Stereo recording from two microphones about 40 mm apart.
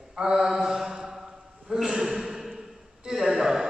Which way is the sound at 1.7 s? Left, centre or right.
Centre.